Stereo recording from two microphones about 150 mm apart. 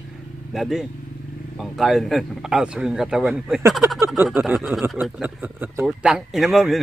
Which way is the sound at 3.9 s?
15° right (ahead or behind).